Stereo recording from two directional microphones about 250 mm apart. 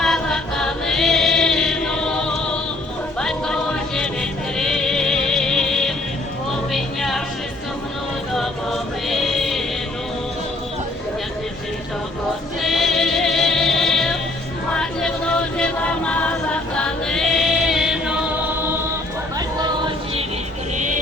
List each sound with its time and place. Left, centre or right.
0.0 s chant: centre
3.2 s music: centre
8.4 s chant: centre
12.6 s music: centre
14.7 s chant: centre
19.5 s a sound: centre